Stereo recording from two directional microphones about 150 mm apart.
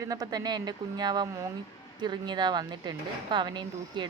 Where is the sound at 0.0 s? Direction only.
25° right (ahead or behind).